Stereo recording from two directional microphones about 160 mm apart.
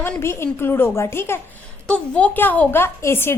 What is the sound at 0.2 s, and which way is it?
A woman's voice, 15° left (ahead or behind).